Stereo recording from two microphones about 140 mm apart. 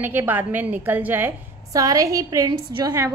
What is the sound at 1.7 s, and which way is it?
A woman's voice, 25° right (ahead or behind).